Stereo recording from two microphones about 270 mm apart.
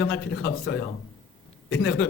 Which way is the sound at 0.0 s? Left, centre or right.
Left.